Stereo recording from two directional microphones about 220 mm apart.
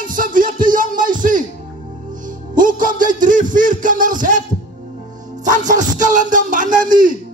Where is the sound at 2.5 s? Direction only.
35° right (ahead or behind).